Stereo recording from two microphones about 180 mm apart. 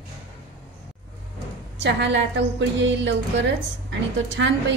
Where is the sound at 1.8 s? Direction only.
75° right (ahead or behind).